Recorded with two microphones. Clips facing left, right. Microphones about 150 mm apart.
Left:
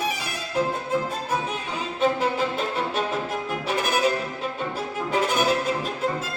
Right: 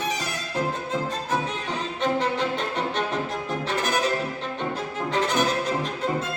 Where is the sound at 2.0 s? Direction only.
5° left (ahead or behind).